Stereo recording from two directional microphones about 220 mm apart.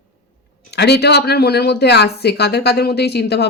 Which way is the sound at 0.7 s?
50° left (ahead or behind).